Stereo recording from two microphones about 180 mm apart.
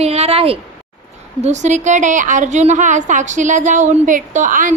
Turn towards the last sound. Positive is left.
turn(degrees=-45)  # may be behind; listen again after turning